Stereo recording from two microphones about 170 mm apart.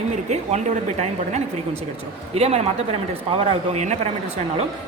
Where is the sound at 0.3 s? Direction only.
40° right (ahead or behind).